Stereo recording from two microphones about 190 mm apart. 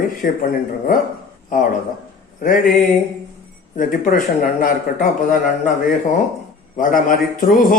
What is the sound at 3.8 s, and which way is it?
A man's voice, 45° left (ahead or behind).